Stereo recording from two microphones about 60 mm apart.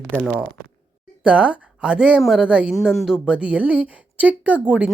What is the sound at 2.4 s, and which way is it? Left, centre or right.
Speech, centre.